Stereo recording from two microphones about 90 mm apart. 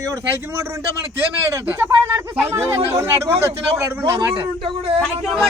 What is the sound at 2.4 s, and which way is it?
A man's voice, 30° right (ahead or behind).